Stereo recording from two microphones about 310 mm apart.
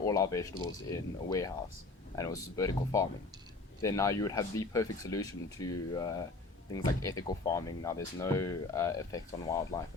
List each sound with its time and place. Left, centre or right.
0.0 s speech: centre